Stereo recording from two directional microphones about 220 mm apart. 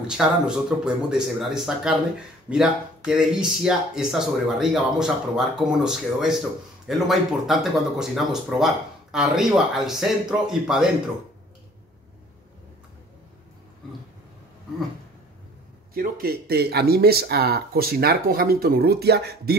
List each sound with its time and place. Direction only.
0.0 s speech: 5° right (ahead or behind)
15.9 s speech: 45° right (ahead or behind)